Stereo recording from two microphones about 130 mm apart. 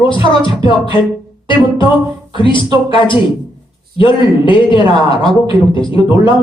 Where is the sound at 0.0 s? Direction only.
40° left (ahead or behind).